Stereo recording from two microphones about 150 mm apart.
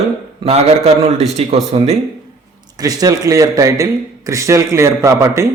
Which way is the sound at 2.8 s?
25° right (ahead or behind).